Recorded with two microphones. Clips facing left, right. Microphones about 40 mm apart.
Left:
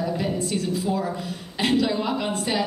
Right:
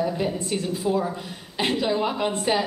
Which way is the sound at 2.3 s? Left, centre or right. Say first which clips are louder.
Right 2 dB; right.